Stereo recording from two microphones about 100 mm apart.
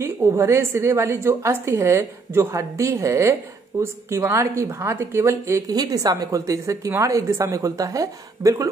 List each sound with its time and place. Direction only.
0.0 s a woman's voice: 30° right (ahead or behind)